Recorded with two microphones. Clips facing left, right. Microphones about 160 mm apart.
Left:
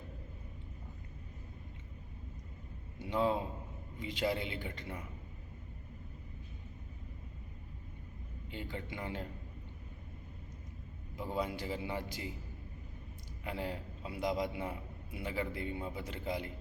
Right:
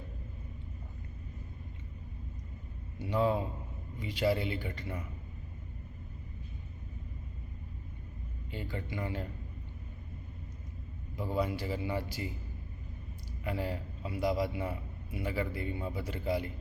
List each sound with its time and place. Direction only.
3.1 s a man's voice: 20° left (ahead or behind)
8.4 s a man's voice: 20° left (ahead or behind)
11.2 s a man's voice: 20° left (ahead or behind)
13.4 s a man's voice: 20° left (ahead or behind)